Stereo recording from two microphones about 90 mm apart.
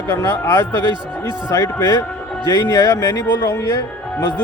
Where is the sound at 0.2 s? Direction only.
35° left (ahead or behind).